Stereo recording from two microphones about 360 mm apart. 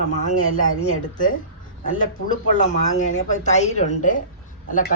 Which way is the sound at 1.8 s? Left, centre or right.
Left.